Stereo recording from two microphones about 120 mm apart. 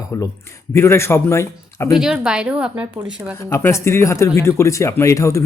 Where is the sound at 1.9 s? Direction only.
5° right (ahead or behind).